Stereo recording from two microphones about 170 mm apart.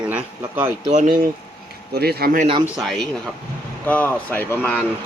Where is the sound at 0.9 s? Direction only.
45° right (ahead or behind).